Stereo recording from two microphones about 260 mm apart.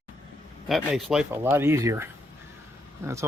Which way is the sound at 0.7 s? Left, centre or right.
Centre.